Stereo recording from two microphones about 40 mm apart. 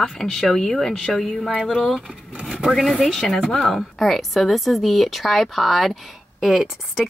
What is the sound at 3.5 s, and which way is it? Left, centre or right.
A woman's voice, centre.